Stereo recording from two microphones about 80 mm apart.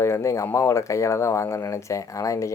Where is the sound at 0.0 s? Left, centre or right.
Left.